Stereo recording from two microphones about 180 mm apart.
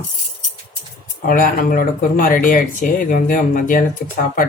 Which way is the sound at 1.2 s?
50° left (ahead or behind).